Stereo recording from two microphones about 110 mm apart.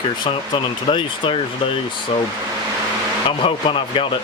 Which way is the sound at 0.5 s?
50° left (ahead or behind).